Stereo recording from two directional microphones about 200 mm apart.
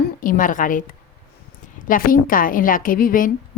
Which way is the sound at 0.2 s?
45° left (ahead or behind).